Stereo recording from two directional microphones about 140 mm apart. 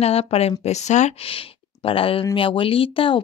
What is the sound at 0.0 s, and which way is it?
Speech, 45° left (ahead or behind).